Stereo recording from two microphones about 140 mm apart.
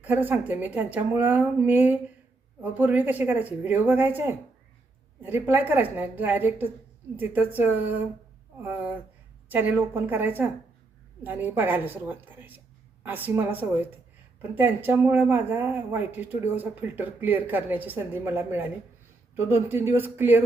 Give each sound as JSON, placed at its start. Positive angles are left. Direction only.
{"t": 0.0, "sound": "speech", "side_deg": -10}